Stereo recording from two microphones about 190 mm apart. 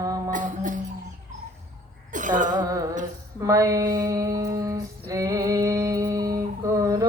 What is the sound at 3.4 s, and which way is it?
Music, 15° right (ahead or behind).